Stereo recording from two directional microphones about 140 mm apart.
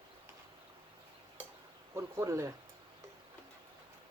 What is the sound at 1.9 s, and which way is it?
Speech, 20° right (ahead or behind).